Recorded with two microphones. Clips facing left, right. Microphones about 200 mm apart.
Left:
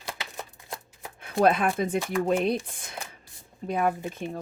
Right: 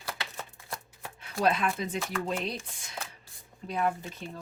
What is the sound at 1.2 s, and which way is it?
Speech, 55° left (ahead or behind).